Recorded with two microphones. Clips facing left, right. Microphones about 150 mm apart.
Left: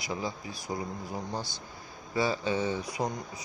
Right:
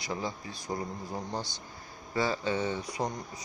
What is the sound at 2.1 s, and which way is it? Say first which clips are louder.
Speech: left 1 dB; 15° left (ahead or behind).